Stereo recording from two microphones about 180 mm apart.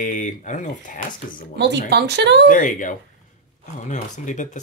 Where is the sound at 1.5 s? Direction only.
70° right (ahead or behind).